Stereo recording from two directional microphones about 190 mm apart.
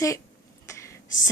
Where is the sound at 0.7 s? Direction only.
15° left (ahead or behind).